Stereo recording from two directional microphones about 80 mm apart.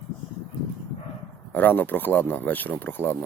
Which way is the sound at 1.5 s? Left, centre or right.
Left.